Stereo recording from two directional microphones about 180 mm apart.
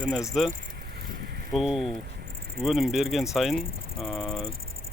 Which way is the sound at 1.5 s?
Centre (ahead or behind).